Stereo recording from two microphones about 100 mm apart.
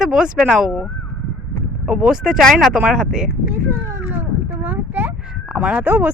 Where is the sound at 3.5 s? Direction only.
20° right (ahead or behind).